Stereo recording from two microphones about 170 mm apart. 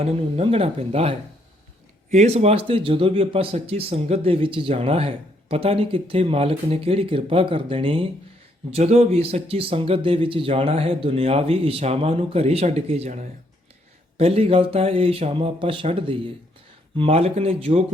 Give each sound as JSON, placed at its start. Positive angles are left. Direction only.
{"t": 0.0, "sound": "a man's voice", "side_deg": -35}